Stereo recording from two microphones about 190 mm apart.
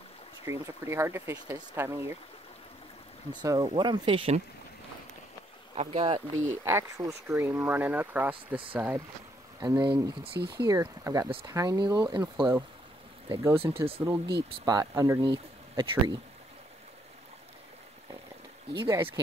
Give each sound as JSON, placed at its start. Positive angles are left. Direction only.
{"t": 0.5, "sound": "speech", "side_deg": -15}
{"t": 3.4, "sound": "speech", "side_deg": -20}
{"t": 5.8, "sound": "speech", "side_deg": -30}
{"t": 6.1, "sound": "speech", "side_deg": -15}
{"t": 13.3, "sound": "speech", "side_deg": -15}
{"t": 13.6, "sound": "speech", "side_deg": -30}
{"t": 14.0, "sound": "speech", "side_deg": -15}
{"t": 18.7, "sound": "speech", "side_deg": -15}